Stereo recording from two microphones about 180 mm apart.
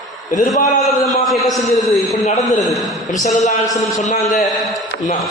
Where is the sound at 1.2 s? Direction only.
Centre (ahead or behind).